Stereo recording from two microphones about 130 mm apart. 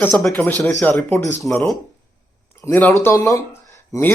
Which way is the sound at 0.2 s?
10° left (ahead or behind).